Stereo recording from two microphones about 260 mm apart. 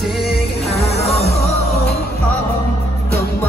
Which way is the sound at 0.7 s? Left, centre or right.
Left.